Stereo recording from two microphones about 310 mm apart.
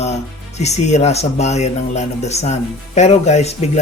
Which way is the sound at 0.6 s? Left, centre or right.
Left.